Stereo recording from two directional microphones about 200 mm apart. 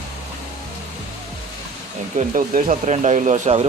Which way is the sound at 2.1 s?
40° right (ahead or behind).